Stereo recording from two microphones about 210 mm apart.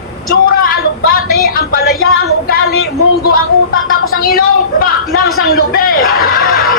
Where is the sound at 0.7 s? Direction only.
45° left (ahead or behind).